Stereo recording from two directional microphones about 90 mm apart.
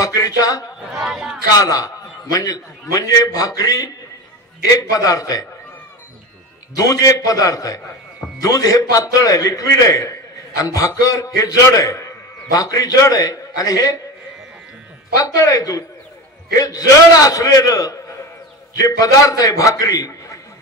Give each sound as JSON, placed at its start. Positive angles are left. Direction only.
{"t": 0.0, "sound": "a man's voice", "side_deg": 45}
{"t": 1.0, "sound": "speech", "side_deg": -5}
{"t": 1.5, "sound": "a man's voice", "side_deg": 40}
{"t": 6.8, "sound": "a man's voice", "side_deg": 40}
{"t": 15.1, "sound": "a man's voice", "side_deg": 40}